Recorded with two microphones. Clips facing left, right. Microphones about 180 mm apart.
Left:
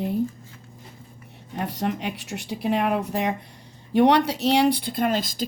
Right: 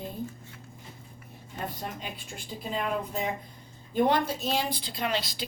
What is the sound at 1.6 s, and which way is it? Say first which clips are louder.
Speech: left 9 dB; 75° left (ahead or behind).